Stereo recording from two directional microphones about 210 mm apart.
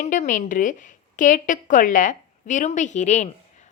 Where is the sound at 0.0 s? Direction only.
35° left (ahead or behind).